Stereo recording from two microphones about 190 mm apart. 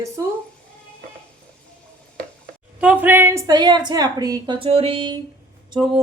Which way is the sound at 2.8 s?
10° right (ahead or behind).